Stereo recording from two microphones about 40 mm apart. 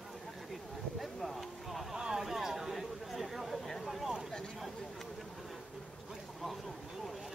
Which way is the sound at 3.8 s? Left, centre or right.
Centre.